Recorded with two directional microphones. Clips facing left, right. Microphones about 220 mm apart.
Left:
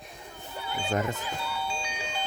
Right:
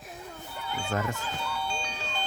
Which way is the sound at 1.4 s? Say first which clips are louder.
Even; 5° left (ahead or behind).